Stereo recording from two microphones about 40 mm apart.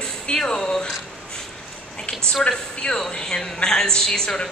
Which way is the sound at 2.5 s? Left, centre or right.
Centre.